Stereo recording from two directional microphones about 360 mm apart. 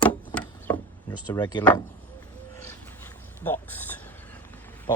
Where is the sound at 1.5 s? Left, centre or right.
Centre.